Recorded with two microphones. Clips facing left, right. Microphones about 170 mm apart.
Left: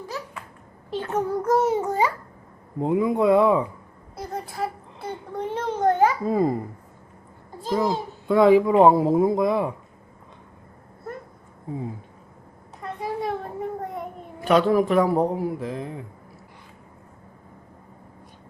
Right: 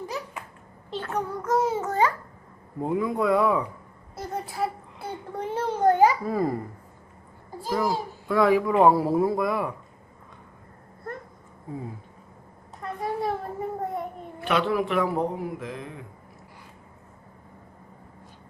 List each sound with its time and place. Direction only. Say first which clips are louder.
0.9 s a sound: left 4 dB; 15° left (ahead or behind)
1.4 s speech: left 3 dB; 35° left (ahead or behind)
1.6 s a child's voice: left 2 dB; 15° left (ahead or behind)
2.8 s a man's voice: left 4 dB; 20° left (ahead or behind)
4.1 s a child's voice: even; 5° right (ahead or behind)
6.2 s a man's voice: left 4 dB; 20° left (ahead or behind)
7.7 s a man's voice: left 3 dB; 20° left (ahead or behind)
12.8 s a sound: even; centre (ahead or behind)
14.4 s speech: left 6 dB; 40° left (ahead or behind)